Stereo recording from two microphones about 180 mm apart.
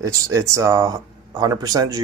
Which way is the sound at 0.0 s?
20° right (ahead or behind).